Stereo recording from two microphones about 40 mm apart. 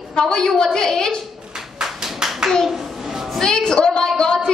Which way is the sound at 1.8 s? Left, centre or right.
Centre.